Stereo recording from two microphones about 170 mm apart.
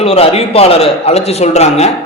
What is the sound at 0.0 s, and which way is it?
A man's voice, 35° left (ahead or behind).